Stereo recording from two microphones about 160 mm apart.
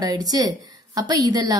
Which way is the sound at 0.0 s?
25° right (ahead or behind).